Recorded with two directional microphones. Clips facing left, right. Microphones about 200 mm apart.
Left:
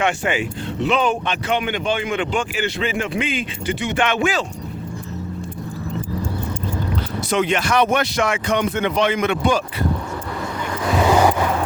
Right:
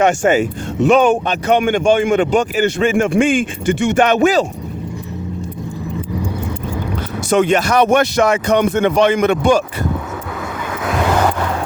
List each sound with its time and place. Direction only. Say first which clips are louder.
0.0 s speech: right 8 dB; 45° right (ahead or behind)
7.3 s speech: right 6 dB; 45° right (ahead or behind)
10.8 s vehicle: left 1 dB; centre (ahead or behind)